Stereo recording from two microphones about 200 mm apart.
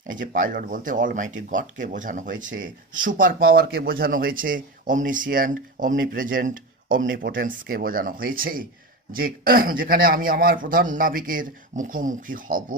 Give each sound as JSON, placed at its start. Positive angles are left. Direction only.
{"t": 0.1, "sound": "speech", "side_deg": -40}